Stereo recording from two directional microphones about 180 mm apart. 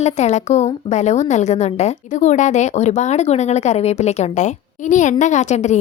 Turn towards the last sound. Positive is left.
turn(degrees=40)  # may be behind; listen again after turning